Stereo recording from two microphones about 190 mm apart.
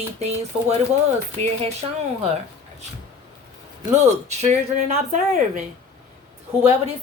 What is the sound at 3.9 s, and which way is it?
Speech, 35° right (ahead or behind).